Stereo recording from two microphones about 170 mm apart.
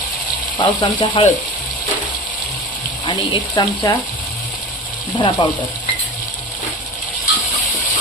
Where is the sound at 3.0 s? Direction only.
25° left (ahead or behind).